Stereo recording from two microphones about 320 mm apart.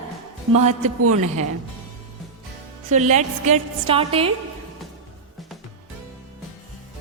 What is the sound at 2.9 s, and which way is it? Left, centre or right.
A woman's voice, right.